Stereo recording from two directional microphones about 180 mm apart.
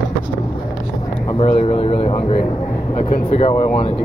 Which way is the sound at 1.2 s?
30° left (ahead or behind).